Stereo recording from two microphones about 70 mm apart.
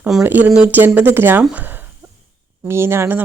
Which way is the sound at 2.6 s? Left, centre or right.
Right.